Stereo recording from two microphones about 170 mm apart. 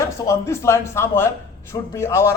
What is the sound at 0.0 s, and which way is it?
Speech, 20° left (ahead or behind).